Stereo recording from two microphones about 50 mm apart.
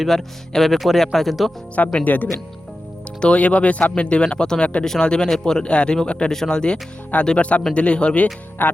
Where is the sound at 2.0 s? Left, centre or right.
Left.